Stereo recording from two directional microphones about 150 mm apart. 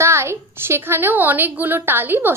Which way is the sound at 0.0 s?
20° right (ahead or behind).